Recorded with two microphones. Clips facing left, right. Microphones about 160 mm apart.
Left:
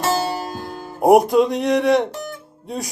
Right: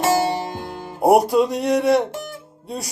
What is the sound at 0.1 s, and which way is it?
Music, 20° right (ahead or behind).